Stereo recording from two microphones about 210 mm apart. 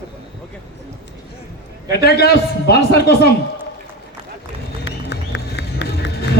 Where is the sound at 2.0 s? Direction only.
50° left (ahead or behind).